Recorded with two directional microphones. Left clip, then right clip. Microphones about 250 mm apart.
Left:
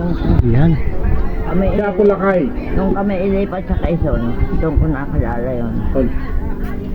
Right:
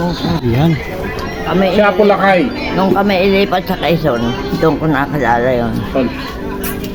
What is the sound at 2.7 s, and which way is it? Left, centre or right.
Speech, right.